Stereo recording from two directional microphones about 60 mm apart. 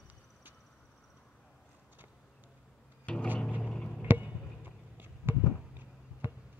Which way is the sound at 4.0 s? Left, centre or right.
Right.